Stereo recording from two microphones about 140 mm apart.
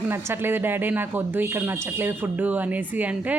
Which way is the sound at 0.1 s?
15° right (ahead or behind).